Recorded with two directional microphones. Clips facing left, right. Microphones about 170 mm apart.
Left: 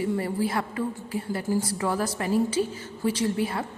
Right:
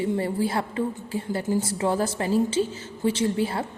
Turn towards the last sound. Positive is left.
turn(degrees=-30)  # may be behind; listen again after turning